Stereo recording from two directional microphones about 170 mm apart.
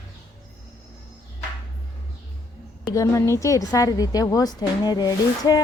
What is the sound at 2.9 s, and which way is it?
A woman's voice, 15° left (ahead or behind).